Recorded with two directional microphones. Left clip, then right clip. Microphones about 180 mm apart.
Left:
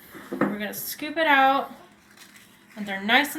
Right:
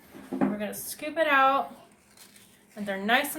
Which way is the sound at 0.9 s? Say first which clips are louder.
Left 3 dB; 45° right (ahead or behind).